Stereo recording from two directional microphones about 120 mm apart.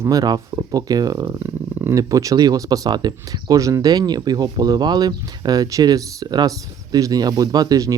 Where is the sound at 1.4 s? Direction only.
20° right (ahead or behind).